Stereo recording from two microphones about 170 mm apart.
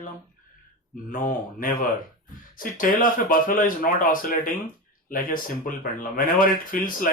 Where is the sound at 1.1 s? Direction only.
55° left (ahead or behind).